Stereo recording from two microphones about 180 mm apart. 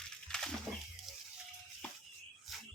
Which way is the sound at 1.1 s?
Centre (ahead or behind).